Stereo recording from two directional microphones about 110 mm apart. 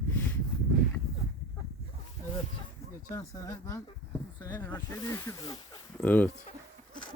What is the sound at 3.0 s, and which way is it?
Speech, 30° left (ahead or behind).